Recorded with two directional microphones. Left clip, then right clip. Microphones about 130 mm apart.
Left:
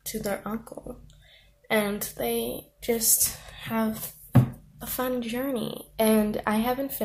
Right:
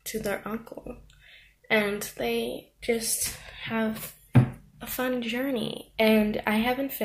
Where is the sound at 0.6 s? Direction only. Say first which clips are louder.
Even; 10° left (ahead or behind).